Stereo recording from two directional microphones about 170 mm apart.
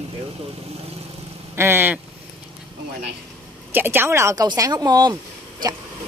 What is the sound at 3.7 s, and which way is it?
Speech, 10° right (ahead or behind).